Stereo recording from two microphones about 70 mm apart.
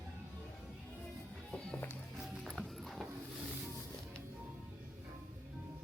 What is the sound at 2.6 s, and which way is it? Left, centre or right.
Music, centre.